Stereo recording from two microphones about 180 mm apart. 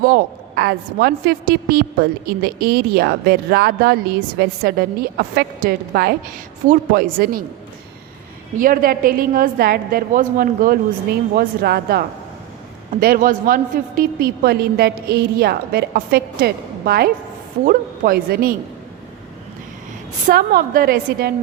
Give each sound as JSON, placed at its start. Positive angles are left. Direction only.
{"t": 0.0, "sound": "a woman's voice", "side_deg": -60}
{"t": 8.5, "sound": "a woman's voice", "side_deg": -50}
{"t": 20.2, "sound": "a woman's voice", "side_deg": -55}